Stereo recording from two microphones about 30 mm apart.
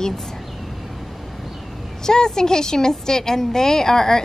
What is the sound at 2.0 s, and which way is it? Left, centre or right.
A woman's voice, left.